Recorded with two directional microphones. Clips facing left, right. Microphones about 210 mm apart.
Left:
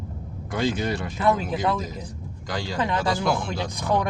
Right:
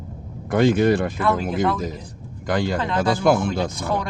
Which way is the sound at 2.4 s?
55° right (ahead or behind).